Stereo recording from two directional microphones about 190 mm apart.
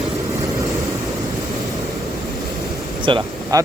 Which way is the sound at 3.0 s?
20° right (ahead or behind).